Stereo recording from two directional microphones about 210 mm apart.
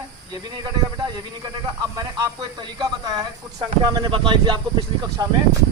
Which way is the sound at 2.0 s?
15° right (ahead or behind).